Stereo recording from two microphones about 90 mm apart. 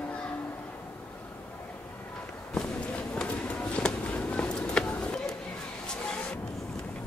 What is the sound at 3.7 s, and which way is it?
Music, 15° left (ahead or behind).